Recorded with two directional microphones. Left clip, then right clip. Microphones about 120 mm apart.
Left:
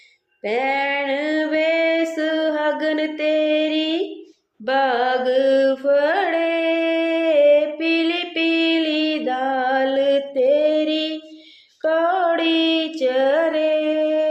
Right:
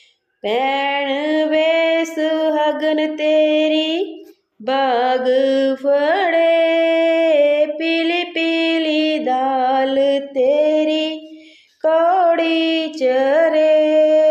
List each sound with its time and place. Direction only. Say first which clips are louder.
0.4 s female singing: right 3 dB; 30° right (ahead or behind)
4.6 s carnatic music: right 2 dB; 35° right (ahead or behind); by 11.2 s 15° right (ahead or behind)
11.8 s child singing: right 4 dB; 25° right (ahead or behind)
13.0 s female singing: right 4 dB; 35° right (ahead or behind)